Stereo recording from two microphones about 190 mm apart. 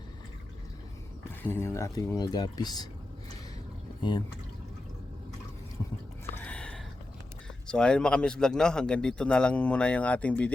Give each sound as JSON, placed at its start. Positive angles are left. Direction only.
{"t": 1.2, "sound": "speech", "side_deg": 10}
{"t": 6.2, "sound": "a sound", "side_deg": 5}
{"t": 7.7, "sound": "a man's voice", "side_deg": 5}